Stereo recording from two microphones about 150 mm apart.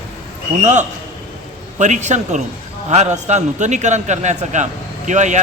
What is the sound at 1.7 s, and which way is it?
A man's voice, 50° right (ahead or behind).